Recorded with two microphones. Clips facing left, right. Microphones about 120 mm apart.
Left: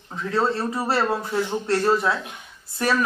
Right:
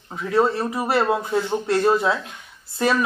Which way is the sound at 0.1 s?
15° right (ahead or behind).